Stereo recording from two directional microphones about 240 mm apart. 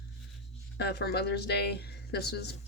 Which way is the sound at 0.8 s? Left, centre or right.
Left.